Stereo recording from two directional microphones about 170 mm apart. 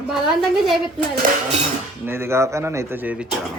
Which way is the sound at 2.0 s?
15° right (ahead or behind).